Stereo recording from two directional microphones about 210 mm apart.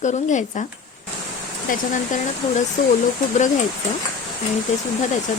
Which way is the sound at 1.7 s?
40° left (ahead or behind).